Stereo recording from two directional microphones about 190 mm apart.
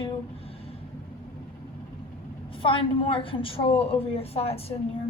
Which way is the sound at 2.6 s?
25° left (ahead or behind).